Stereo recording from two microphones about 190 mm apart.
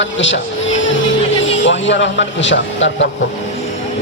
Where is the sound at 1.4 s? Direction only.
75° left (ahead or behind).